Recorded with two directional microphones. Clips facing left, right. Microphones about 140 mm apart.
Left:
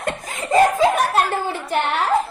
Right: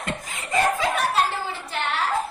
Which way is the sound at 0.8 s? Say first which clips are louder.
Left 6 dB; 50° left (ahead or behind).